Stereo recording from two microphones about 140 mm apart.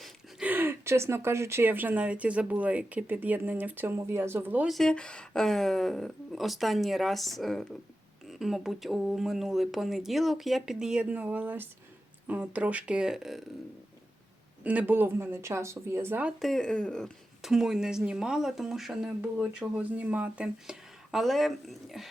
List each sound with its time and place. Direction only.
0.0 s speech: 10° right (ahead or behind)
4.7 s speech: 5° left (ahead or behind)
14.6 s speech: 10° right (ahead or behind)
16.4 s speech: 5° left (ahead or behind)